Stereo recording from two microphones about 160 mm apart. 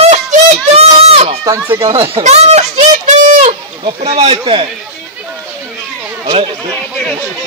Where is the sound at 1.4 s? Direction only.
20° right (ahead or behind).